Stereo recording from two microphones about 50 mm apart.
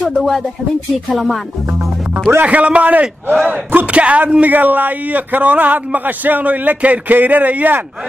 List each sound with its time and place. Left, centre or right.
0.1 s speech: centre
2.4 s a man's voice: right